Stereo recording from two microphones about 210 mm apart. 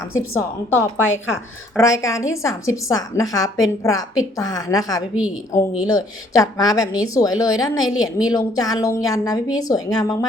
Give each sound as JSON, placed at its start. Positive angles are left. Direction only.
{"t": 0.1, "sound": "a woman's voice", "side_deg": 15}